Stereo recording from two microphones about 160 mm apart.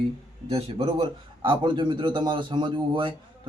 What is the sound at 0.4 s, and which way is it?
A man's voice, 40° right (ahead or behind).